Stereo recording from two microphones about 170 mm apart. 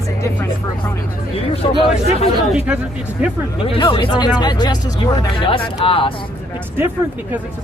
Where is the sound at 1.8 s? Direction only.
35° left (ahead or behind).